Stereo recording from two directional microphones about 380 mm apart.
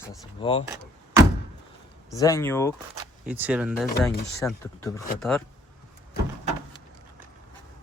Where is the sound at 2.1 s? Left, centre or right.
Centre.